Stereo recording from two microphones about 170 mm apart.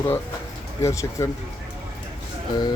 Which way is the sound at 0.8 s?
15° left (ahead or behind).